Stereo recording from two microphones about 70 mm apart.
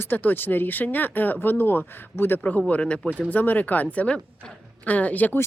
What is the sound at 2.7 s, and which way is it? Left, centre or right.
Speech, centre.